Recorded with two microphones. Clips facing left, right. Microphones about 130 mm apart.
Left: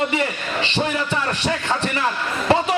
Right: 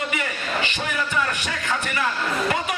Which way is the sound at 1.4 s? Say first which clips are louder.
Left 5 dB; 30° left (ahead or behind).